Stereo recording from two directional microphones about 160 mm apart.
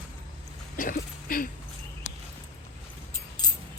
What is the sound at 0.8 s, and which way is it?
Speech, 60° left (ahead or behind).